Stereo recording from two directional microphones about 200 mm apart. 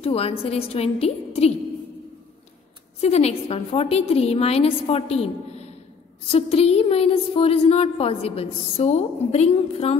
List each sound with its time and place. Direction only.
0.0 s a woman's voice: 30° left (ahead or behind)
3.0 s a woman's voice: 30° left (ahead or behind)